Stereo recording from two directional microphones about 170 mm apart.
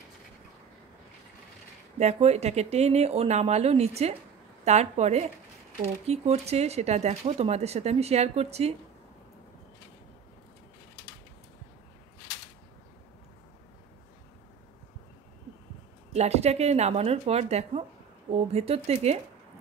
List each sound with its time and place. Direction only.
2.0 s speech: 40° right (ahead or behind)
16.1 s speech: 40° right (ahead or behind)